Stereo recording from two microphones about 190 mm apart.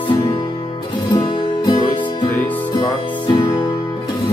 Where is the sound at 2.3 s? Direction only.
10° left (ahead or behind).